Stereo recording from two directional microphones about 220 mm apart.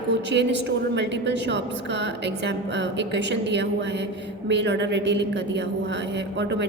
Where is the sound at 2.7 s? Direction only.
55° right (ahead or behind).